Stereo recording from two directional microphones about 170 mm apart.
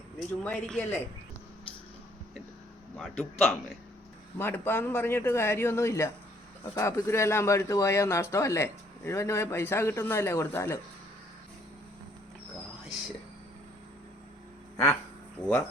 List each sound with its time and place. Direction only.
0.2 s a man's voice: 5° left (ahead or behind)
3.0 s a man's voice: centre (ahead or behind)
4.4 s speech: 15° left (ahead or behind)
15.4 s speech: 10° left (ahead or behind)